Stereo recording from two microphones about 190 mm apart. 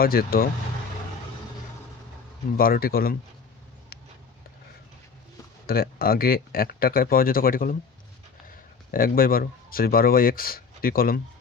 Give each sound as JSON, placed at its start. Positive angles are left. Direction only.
{"t": 0.0, "sound": "speech", "side_deg": 50}
{"t": 2.6, "sound": "speech", "side_deg": 50}
{"t": 3.9, "sound": "a sound", "side_deg": 50}
{"t": 5.6, "sound": "speech", "side_deg": 50}